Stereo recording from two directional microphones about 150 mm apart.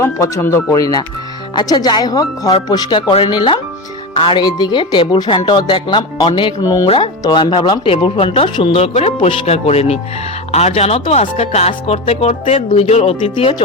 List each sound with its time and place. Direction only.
0.0 s speech: 20° left (ahead or behind)
6.8 s speech: 35° left (ahead or behind)